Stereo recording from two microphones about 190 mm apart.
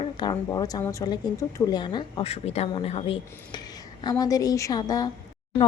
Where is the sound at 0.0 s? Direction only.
25° left (ahead or behind).